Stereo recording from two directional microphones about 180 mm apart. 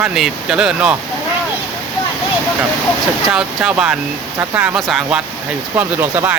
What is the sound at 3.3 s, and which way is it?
Speech, 5° right (ahead or behind).